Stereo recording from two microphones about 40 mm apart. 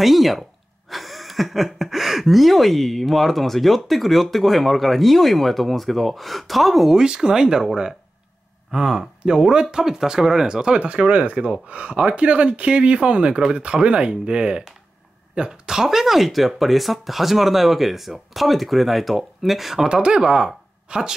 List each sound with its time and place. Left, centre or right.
0.0 s speech: centre
7.0 s speech: centre
8.7 s speech: centre
15.7 s speech: centre
19.9 s speech: right